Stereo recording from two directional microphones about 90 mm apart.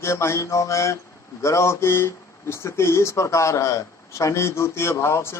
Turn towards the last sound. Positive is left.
turn(degrees=30)  # may be behind; listen again after turning